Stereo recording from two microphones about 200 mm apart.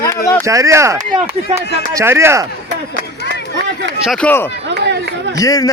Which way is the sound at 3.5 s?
65° right (ahead or behind).